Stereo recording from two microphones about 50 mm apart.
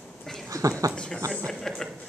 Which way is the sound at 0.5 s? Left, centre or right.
Right.